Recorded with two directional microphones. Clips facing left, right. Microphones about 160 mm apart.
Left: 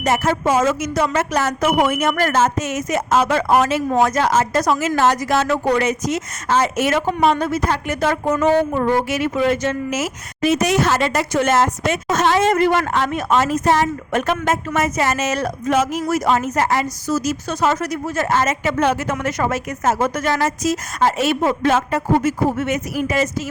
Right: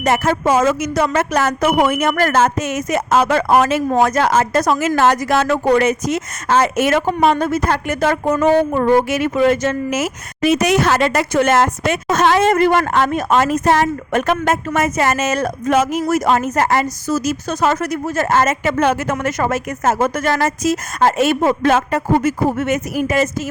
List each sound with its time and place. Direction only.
0.0 s a woman's voice: 60° right (ahead or behind)
13.4 s a woman's voice: 60° right (ahead or behind)